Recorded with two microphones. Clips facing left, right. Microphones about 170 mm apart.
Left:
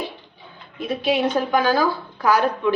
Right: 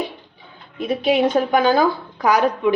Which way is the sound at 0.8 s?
20° right (ahead or behind).